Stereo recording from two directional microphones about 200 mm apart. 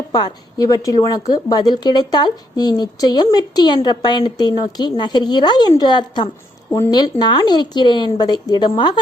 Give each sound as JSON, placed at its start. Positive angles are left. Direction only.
{"t": 0.1, "sound": "a woman's voice", "side_deg": 20}